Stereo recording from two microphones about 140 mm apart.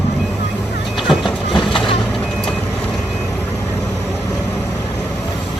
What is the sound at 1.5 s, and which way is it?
Vehicle, 35° left (ahead or behind).